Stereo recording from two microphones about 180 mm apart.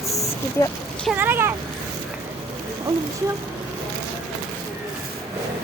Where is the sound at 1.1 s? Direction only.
10° right (ahead or behind).